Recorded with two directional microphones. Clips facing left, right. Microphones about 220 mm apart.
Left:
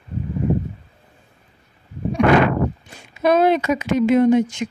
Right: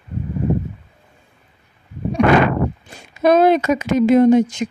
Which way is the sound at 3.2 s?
45° right (ahead or behind).